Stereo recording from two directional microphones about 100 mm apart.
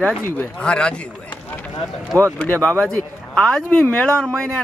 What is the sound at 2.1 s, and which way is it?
Speech, 15° left (ahead or behind).